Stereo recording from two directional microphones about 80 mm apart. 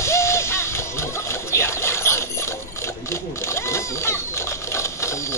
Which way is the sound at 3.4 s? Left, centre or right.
Left.